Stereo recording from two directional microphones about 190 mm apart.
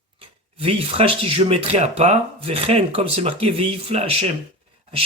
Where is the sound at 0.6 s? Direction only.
30° right (ahead or behind).